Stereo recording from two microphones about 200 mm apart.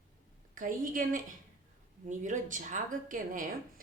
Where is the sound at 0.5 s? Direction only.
40° right (ahead or behind).